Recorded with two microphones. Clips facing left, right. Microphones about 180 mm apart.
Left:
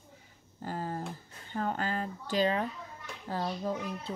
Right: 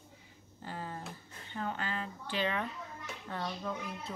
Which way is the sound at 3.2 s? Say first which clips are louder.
Left 5 dB; 35° left (ahead or behind).